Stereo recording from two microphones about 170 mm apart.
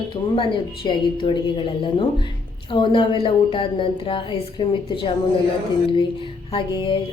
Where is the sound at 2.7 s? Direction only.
30° left (ahead or behind).